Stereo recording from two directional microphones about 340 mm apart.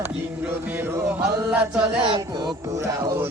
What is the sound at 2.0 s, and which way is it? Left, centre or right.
Music, centre.